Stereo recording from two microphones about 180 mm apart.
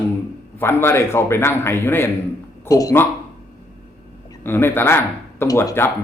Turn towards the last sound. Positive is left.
turn(degrees=15)  # may be behind; listen again after turning